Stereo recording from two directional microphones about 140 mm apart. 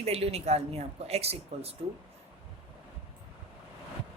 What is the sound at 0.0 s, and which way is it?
A man's voice, 45° right (ahead or behind).